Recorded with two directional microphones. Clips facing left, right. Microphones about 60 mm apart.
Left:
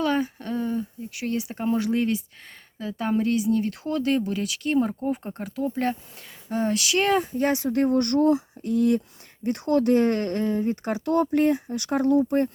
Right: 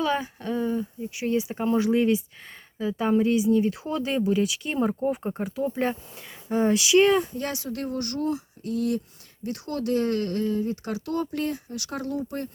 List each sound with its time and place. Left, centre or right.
0.0 s speech: centre
6.8 s speech: centre
7.3 s speech: left